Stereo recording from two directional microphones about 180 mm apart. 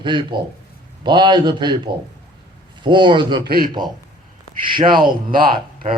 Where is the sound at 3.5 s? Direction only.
55° right (ahead or behind).